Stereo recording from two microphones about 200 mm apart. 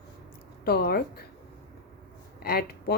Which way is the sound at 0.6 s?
50° left (ahead or behind).